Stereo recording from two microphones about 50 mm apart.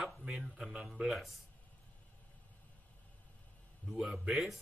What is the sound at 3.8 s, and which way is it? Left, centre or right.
Speech, left.